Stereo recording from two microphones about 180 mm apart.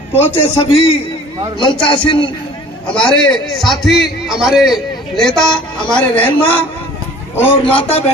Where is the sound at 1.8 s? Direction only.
25° left (ahead or behind).